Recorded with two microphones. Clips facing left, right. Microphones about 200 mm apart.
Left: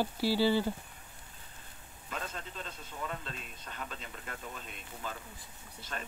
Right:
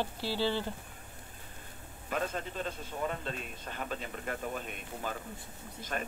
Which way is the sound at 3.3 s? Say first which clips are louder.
Right 6 dB; 50° right (ahead or behind).